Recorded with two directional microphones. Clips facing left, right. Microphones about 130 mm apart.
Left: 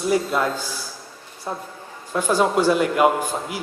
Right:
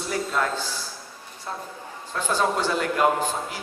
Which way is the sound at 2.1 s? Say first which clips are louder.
Left 5 dB; 10° left (ahead or behind).